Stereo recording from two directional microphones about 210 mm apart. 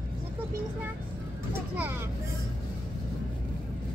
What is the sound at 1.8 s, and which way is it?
Vehicle, 10° right (ahead or behind).